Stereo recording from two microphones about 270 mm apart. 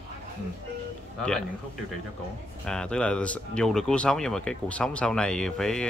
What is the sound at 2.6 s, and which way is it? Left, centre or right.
Speech, centre.